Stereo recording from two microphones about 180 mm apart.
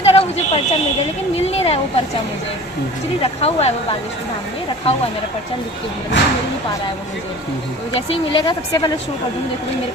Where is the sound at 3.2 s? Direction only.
35° left (ahead or behind).